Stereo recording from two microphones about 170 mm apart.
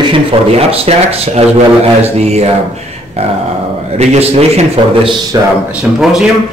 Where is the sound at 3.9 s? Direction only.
40° right (ahead or behind).